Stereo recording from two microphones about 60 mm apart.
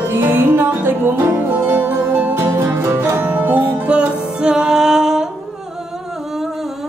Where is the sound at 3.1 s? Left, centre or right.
Right.